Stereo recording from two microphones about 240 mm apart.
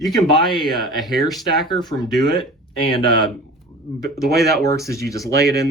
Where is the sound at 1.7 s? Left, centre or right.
Centre.